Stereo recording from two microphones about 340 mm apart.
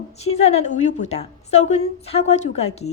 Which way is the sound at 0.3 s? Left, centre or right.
Centre.